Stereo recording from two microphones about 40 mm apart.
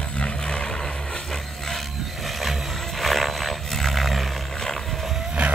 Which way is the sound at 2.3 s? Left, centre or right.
Centre.